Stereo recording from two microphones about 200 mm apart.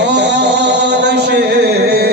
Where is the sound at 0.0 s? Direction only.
60° right (ahead or behind).